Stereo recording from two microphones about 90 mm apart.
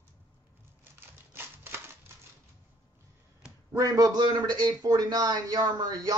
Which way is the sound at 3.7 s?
40° right (ahead or behind).